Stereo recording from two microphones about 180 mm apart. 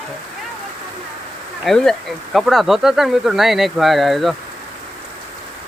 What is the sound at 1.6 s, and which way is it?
Speech, centre (ahead or behind).